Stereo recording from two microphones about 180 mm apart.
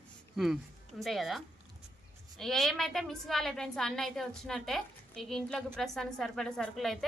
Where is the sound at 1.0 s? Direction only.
Centre (ahead or behind).